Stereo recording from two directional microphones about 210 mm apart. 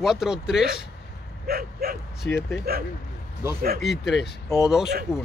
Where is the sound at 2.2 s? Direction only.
55° left (ahead or behind).